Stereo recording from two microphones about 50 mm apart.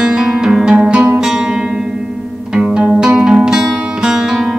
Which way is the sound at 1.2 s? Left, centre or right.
Centre.